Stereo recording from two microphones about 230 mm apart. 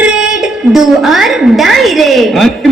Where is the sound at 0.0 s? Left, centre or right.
Centre.